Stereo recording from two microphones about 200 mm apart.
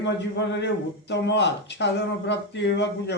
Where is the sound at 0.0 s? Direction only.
60° left (ahead or behind).